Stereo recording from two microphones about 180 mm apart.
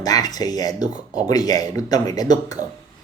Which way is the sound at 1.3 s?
20° left (ahead or behind).